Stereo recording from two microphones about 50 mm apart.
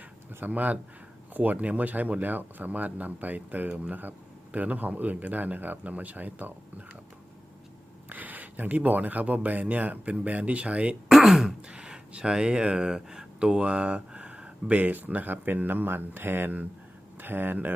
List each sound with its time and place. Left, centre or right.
0.3 s speech: right
8.1 s speech: right
11.1 s throat clearing: centre
11.7 s speech: centre; by 17.7 s right